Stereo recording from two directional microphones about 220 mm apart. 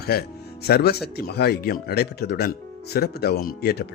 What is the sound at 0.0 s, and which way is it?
Speech, 45° left (ahead or behind).